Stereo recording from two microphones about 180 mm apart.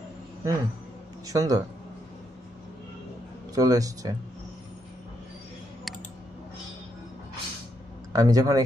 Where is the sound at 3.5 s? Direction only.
20° right (ahead or behind).